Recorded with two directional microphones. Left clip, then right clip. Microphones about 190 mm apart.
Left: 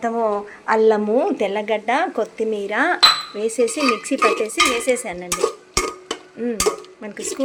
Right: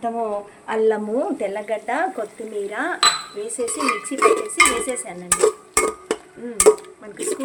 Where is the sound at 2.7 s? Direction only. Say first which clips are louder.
Left 7 dB; 35° left (ahead or behind).